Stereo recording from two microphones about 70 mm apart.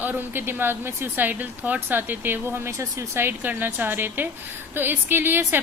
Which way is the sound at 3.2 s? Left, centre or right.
Right.